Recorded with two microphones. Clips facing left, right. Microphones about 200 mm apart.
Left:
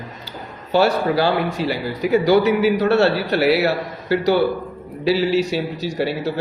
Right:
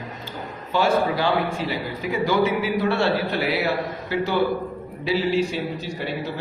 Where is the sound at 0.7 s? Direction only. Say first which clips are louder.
Left 4 dB; 75° left (ahead or behind).